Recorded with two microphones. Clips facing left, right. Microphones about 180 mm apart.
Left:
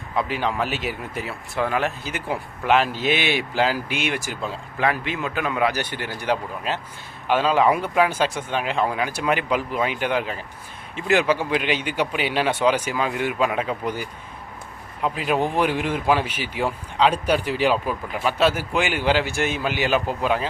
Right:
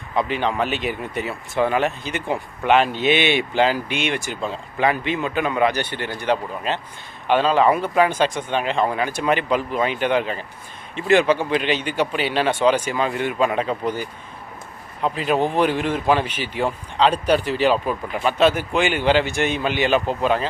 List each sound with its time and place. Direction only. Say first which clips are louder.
0.2 s a man's voice: right 2 dB; 5° left (ahead or behind)